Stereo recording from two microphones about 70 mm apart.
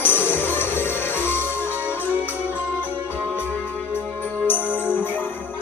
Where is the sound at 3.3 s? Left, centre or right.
Left.